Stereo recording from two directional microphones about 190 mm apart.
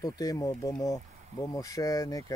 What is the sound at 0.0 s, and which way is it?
Speech, 20° left (ahead or behind).